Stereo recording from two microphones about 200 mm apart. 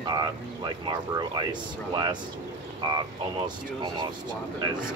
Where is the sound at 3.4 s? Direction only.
20° right (ahead or behind).